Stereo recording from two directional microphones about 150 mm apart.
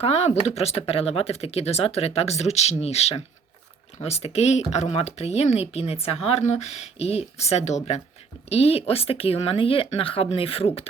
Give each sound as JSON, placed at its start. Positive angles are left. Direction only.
{"t": 0.0, "sound": "speech", "side_deg": 45}